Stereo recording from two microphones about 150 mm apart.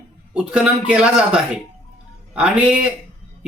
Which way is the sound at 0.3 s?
10° right (ahead or behind).